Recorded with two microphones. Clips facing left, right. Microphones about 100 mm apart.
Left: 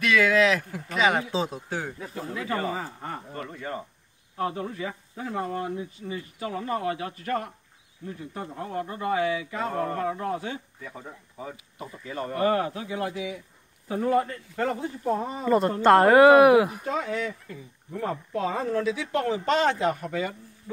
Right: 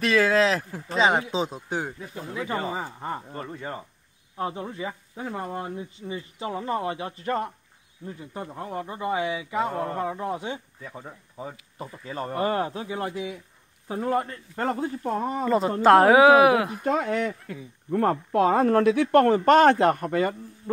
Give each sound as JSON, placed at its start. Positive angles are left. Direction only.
{"t": 0.0, "sound": "speech", "side_deg": -35}
{"t": 4.4, "sound": "speech", "side_deg": -25}
{"t": 12.0, "sound": "speech", "side_deg": -30}
{"t": 14.6, "sound": "speech", "side_deg": -40}
{"t": 15.4, "sound": "speech", "side_deg": 0}
{"t": 16.8, "sound": "speech", "side_deg": -55}